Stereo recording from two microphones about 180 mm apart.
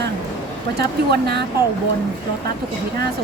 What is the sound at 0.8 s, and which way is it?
Speech, 65° right (ahead or behind).